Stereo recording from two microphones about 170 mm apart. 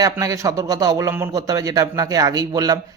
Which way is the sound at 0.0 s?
20° right (ahead or behind).